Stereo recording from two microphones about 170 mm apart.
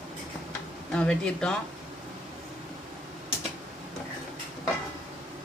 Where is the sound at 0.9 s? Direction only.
5° left (ahead or behind).